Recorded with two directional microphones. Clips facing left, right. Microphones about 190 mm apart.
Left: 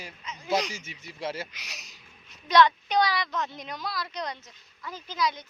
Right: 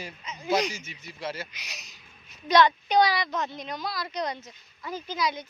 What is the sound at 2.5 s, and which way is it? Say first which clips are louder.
Speech: even; 5° right (ahead or behind).